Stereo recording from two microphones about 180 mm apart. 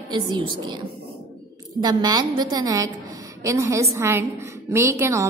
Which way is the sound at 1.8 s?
20° right (ahead or behind).